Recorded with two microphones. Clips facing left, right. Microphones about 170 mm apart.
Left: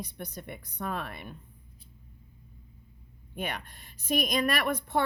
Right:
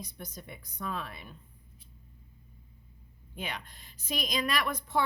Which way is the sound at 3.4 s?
55° left (ahead or behind).